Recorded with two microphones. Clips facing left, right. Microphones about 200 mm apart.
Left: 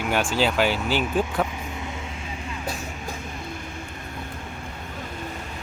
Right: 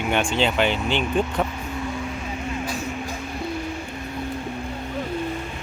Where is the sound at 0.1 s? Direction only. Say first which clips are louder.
Right 1 dB; 5° left (ahead or behind).